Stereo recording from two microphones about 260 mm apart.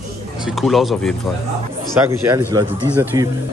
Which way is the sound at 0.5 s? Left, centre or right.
Centre.